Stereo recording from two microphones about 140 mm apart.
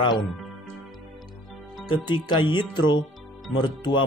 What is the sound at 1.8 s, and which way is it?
A man's voice, 35° left (ahead or behind).